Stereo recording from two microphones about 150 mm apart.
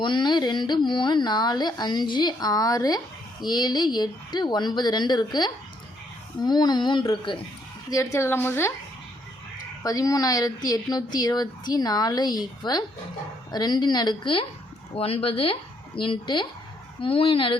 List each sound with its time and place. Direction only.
0.0 s speech: 30° left (ahead or behind)
7.9 s a woman's voice: 20° left (ahead or behind)
9.8 s speech: 25° left (ahead or behind)